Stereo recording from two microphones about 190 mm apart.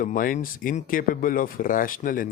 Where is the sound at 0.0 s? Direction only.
45° left (ahead or behind).